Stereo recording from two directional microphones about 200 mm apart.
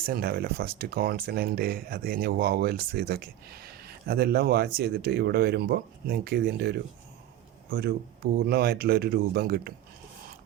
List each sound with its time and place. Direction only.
0.0 s speech: 50° right (ahead or behind)